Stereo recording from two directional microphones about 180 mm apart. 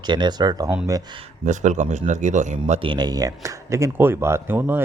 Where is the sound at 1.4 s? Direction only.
45° right (ahead or behind).